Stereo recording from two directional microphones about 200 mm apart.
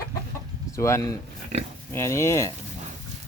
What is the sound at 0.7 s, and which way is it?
Speech, 15° left (ahead or behind).